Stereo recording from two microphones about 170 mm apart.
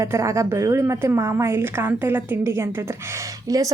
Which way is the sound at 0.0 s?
15° right (ahead or behind).